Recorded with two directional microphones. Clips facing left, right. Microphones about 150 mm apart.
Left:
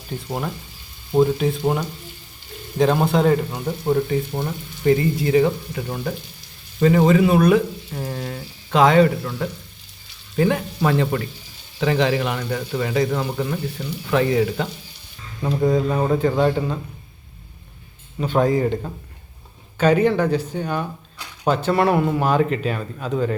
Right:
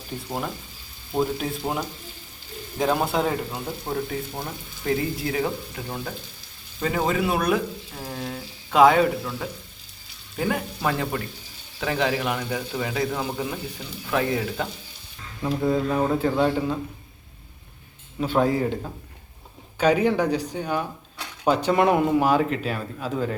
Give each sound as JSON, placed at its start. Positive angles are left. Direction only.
{"t": 1.4, "sound": "speech", "side_deg": 0}
{"t": 18.2, "sound": "speech", "side_deg": -5}